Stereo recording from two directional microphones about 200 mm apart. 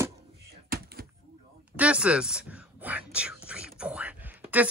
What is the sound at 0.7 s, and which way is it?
Door, 50° right (ahead or behind).